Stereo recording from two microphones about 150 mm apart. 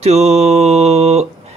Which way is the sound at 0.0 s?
45° right (ahead or behind).